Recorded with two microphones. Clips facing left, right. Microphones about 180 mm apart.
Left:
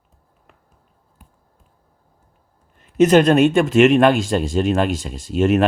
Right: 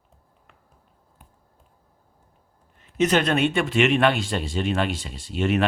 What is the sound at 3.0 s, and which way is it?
Speech, 40° left (ahead or behind).